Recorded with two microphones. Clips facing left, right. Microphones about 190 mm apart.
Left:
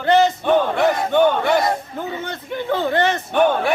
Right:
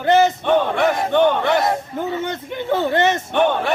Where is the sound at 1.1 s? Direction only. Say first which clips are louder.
Right 1 dB; 10° left (ahead or behind).